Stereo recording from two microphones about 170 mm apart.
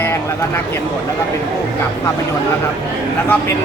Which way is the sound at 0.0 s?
15° left (ahead or behind).